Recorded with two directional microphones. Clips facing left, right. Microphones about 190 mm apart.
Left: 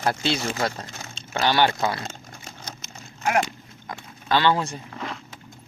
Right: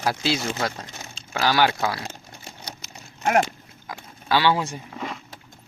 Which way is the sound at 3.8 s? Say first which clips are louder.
Even; 10° right (ahead or behind).